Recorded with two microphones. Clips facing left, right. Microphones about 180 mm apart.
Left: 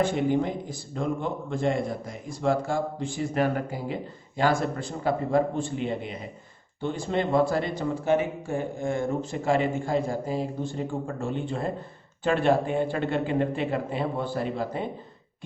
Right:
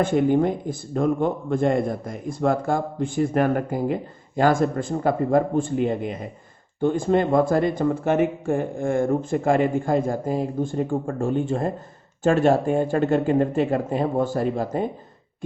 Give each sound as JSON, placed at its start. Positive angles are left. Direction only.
{"t": 0.0, "sound": "a man's voice", "side_deg": -50}